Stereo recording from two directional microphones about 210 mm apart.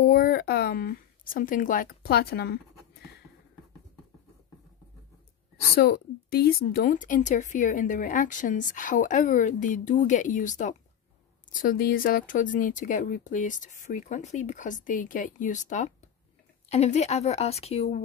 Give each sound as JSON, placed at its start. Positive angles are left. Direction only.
{"t": 0.0, "sound": "speech", "side_deg": 45}
{"t": 5.8, "sound": "speech", "side_deg": 45}